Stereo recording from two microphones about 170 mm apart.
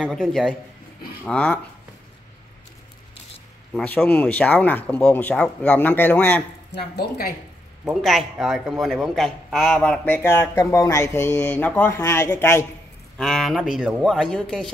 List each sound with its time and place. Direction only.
0.0 s a man's voice: centre (ahead or behind)
3.7 s a man's voice: 10° left (ahead or behind)
6.7 s speech: 75° left (ahead or behind)
7.9 s a man's voice: centre (ahead or behind)
13.2 s speech: centre (ahead or behind)